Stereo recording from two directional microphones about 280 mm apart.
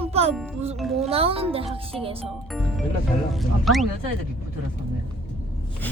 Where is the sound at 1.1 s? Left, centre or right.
Right.